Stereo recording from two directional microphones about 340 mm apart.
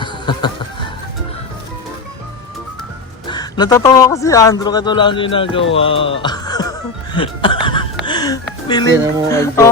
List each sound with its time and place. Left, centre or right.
0.0 s music: centre
3.2 s speech: centre
5.7 s music: centre
8.6 s speech: centre